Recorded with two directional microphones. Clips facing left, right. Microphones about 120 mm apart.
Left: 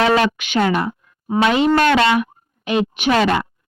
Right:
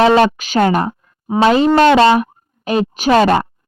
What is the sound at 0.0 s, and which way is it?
Speech, 30° right (ahead or behind).